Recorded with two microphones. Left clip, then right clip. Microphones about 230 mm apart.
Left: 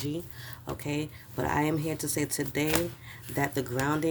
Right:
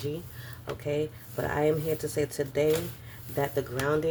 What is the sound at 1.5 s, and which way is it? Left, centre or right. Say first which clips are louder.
Speech: right 3 dB; left.